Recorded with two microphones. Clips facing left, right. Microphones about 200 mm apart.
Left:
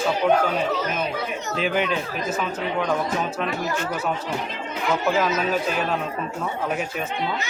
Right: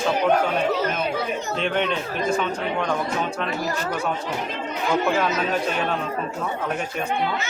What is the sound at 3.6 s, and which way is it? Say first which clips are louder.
Speech: even; 35° right (ahead or behind).